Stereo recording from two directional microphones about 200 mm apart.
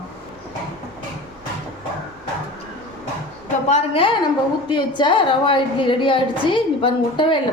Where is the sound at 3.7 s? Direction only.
30° left (ahead or behind).